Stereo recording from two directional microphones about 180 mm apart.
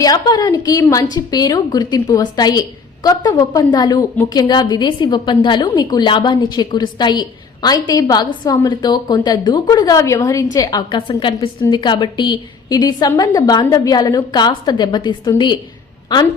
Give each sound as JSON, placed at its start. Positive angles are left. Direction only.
{"t": 0.0, "sound": "a woman's voice", "side_deg": 20}